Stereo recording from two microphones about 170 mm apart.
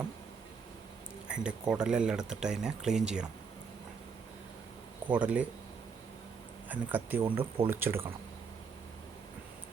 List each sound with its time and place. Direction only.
1.3 s speech: 5° right (ahead or behind)
5.0 s speech: 10° right (ahead or behind)
6.7 s speech: 10° right (ahead or behind)
7.3 s speech: 30° right (ahead or behind)
7.7 s speech: 15° right (ahead or behind)